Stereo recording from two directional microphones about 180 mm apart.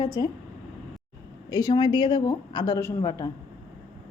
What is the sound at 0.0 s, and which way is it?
Speech, 25° left (ahead or behind).